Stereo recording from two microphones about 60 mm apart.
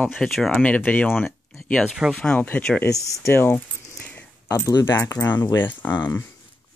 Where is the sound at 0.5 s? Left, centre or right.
Left.